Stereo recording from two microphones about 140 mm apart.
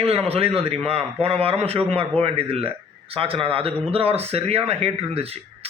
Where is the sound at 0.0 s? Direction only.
45° right (ahead or behind).